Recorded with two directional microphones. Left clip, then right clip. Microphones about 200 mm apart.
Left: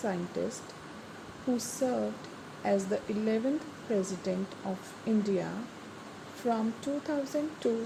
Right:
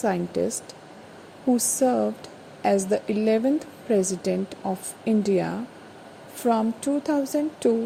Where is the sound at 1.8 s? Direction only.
35° right (ahead or behind).